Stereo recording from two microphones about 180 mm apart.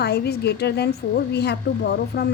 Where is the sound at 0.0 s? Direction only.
65° left (ahead or behind).